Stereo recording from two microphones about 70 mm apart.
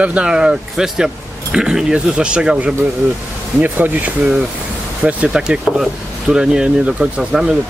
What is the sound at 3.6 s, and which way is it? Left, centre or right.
Speech, right.